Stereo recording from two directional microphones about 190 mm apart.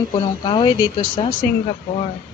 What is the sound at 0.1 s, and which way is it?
Speech, 25° left (ahead or behind).